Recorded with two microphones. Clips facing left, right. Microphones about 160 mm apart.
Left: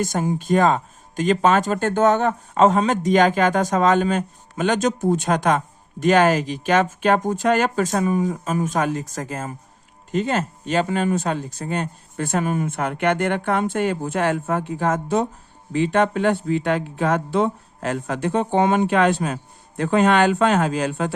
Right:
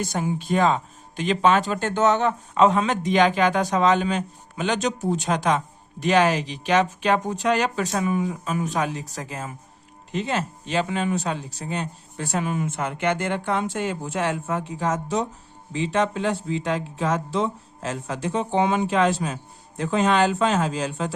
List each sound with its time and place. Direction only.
0.0 s speech: 45° left (ahead or behind)